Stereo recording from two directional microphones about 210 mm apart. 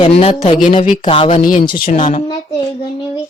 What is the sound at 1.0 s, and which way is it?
Speech, 25° left (ahead or behind).